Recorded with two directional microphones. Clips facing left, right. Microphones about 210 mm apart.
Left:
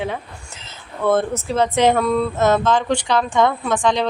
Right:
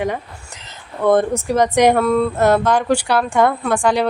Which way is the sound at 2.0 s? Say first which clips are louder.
Right 3 dB; centre (ahead or behind).